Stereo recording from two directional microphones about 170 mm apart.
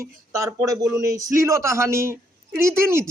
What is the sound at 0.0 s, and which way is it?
A man's voice, 15° right (ahead or behind).